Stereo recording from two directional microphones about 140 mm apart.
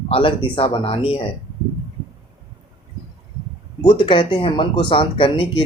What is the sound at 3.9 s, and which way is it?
Speech, 35° left (ahead or behind).